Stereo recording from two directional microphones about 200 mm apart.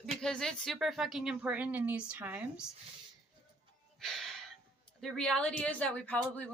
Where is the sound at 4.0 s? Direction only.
Centre (ahead or behind).